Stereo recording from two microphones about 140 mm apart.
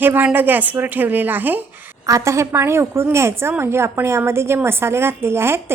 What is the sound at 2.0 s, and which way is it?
A woman's voice, 25° right (ahead or behind).